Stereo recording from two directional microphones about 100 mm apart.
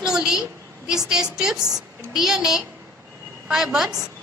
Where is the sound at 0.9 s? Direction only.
5° right (ahead or behind).